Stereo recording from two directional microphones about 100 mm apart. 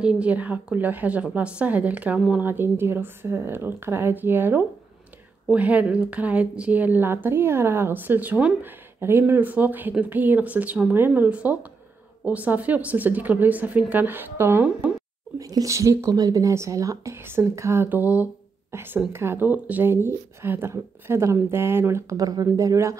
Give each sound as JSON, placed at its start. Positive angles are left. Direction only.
{"t": 0.0, "sound": "a woman's voice", "side_deg": -10}
{"t": 15.3, "sound": "speech", "side_deg": -35}
{"t": 17.8, "sound": "speech", "side_deg": -15}
{"t": 22.2, "sound": "speech", "side_deg": -35}